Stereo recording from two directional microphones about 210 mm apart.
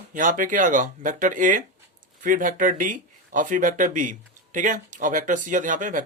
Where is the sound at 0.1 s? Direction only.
40° right (ahead or behind).